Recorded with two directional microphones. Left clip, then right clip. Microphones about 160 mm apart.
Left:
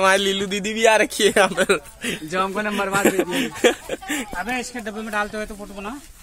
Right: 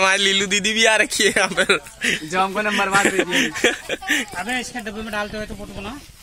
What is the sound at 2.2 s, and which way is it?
Speech, 40° right (ahead or behind).